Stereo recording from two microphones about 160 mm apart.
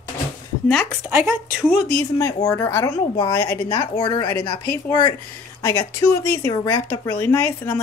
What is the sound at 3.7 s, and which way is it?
A woman's voice, 25° left (ahead or behind).